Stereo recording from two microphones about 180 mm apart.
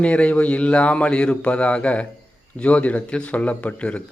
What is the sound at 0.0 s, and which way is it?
A man's voice, 5° left (ahead or behind).